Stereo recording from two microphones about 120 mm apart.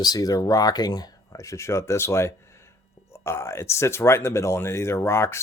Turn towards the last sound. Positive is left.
turn(degrees=20)  # may be behind; listen again after turning